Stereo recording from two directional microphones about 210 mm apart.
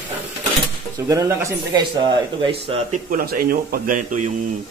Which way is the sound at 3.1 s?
45° right (ahead or behind).